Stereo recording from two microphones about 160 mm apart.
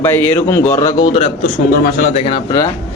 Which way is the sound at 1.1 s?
40° left (ahead or behind).